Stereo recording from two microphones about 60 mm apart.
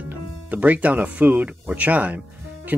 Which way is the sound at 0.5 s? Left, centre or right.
Right.